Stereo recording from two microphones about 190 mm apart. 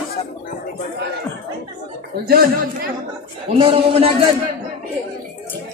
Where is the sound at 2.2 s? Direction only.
50° right (ahead or behind).